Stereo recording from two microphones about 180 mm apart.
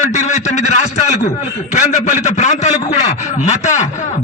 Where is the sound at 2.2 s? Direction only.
40° left (ahead or behind).